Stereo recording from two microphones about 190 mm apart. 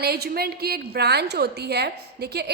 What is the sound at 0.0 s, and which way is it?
A woman's voice, 55° right (ahead or behind).